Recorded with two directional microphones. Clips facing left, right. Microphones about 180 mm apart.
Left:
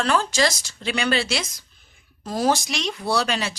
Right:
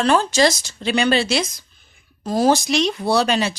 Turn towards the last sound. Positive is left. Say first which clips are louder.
# right 5 dB
turn(degrees=-25)  # may be behind; listen again after turning